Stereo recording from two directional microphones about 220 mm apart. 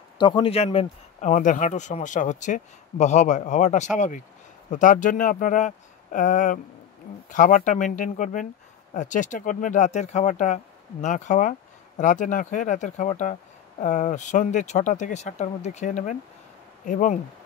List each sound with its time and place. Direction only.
0.2 s speech: 20° left (ahead or behind)